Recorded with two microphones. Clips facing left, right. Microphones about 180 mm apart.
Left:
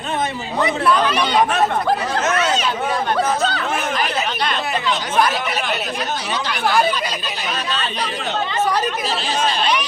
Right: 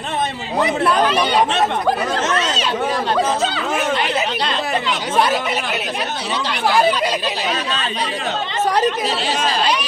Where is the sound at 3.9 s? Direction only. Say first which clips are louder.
Right 2 dB; 30° right (ahead or behind).